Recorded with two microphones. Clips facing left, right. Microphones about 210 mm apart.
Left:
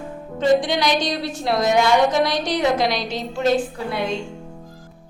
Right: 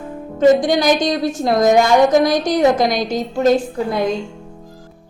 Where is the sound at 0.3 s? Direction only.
45° right (ahead or behind).